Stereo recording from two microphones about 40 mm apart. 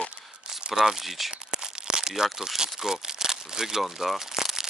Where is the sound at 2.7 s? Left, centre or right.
Centre.